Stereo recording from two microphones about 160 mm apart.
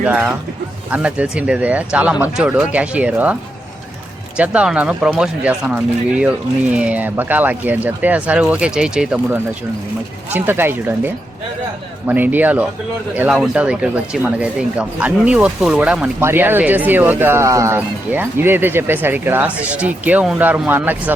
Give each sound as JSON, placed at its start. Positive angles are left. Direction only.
{"t": 0.0, "sound": "speech", "side_deg": -5}
{"t": 4.4, "sound": "speech", "side_deg": -5}